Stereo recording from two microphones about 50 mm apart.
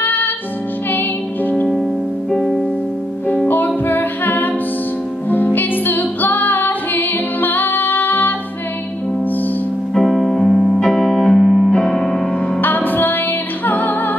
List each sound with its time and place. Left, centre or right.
0.0 s music: left
2.3 s music: centre
3.4 s music: left
9.9 s music: centre
12.5 s music: left